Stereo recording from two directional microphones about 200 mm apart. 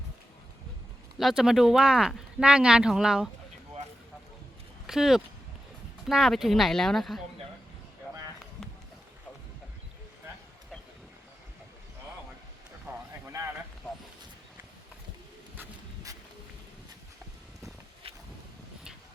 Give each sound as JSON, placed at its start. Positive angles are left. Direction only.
{"t": 1.2, "sound": "speech", "side_deg": 0}
{"t": 4.9, "sound": "speech", "side_deg": 0}
{"t": 18.0, "sound": "a sound", "side_deg": -30}